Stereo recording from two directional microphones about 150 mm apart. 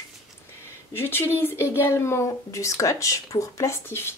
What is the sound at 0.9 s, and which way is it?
Speech, 15° left (ahead or behind).